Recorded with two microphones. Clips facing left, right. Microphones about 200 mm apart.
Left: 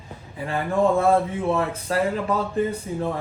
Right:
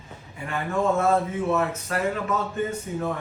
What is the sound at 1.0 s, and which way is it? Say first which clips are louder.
Speech: left 3 dB; 30° left (ahead or behind).